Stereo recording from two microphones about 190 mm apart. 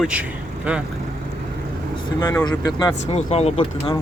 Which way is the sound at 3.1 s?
35° left (ahead or behind).